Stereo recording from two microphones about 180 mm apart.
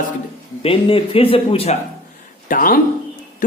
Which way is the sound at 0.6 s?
30° left (ahead or behind).